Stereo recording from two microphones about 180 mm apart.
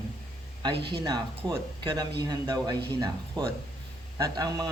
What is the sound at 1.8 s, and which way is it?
Speech, 20° right (ahead or behind).